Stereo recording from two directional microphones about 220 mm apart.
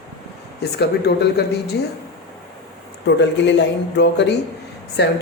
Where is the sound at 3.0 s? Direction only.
55° left (ahead or behind).